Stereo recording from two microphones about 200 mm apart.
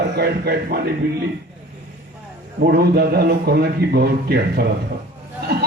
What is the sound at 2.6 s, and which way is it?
A man's voice, 50° right (ahead or behind).